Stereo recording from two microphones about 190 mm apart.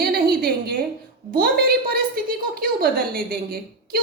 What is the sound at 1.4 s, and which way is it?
A woman's voice, 50° right (ahead or behind).